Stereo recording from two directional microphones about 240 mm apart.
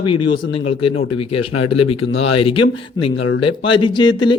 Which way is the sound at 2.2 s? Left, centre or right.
Left.